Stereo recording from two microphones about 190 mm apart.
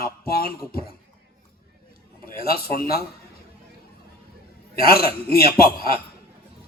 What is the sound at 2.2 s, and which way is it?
Speech, 50° left (ahead or behind).